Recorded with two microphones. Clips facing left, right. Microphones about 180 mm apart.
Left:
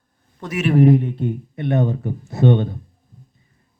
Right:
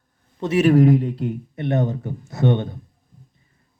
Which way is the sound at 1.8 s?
25° left (ahead or behind).